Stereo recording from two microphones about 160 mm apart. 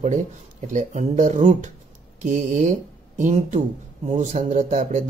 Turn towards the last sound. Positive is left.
turn(degrees=-50)  # may be behind; listen again after turning